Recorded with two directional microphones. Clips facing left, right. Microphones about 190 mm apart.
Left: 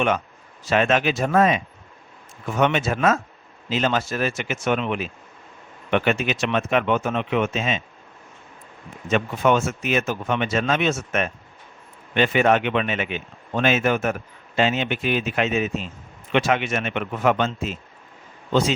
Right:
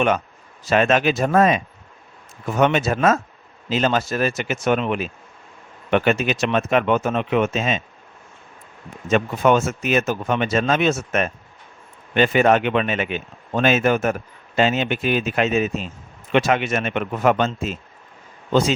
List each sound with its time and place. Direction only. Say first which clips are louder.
0.7 s speech: right 2 dB; 40° right (ahead or behind)
9.0 s speech: right 3 dB; 40° right (ahead or behind)